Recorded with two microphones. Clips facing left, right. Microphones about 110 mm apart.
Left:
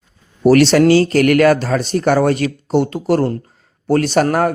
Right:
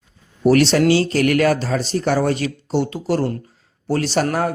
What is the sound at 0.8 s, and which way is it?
A man's voice, 50° left (ahead or behind).